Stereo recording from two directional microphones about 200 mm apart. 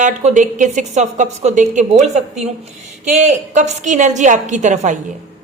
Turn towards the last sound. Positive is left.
turn(degrees=-40)  # may be behind; listen again after turning